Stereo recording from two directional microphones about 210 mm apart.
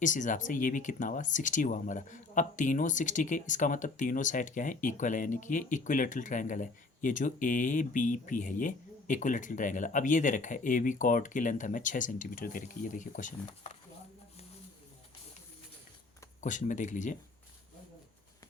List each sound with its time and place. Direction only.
0.0 s speech: 35° left (ahead or behind)
16.4 s speech: 35° left (ahead or behind)